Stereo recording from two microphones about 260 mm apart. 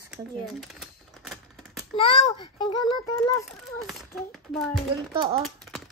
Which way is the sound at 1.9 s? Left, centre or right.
Left.